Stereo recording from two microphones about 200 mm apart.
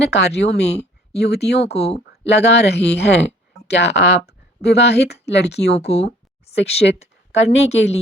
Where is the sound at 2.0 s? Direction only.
60° left (ahead or behind).